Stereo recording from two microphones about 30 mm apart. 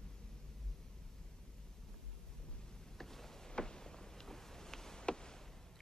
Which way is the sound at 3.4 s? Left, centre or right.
Left.